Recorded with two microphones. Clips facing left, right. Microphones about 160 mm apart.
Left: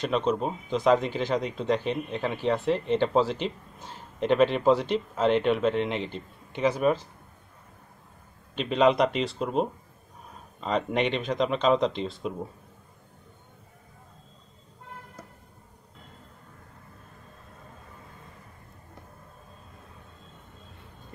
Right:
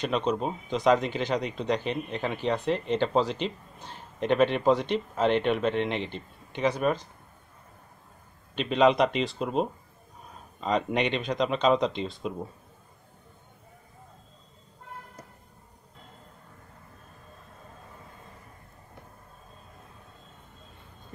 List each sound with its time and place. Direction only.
0.0 s speech: centre (ahead or behind)
8.5 s speech: centre (ahead or behind)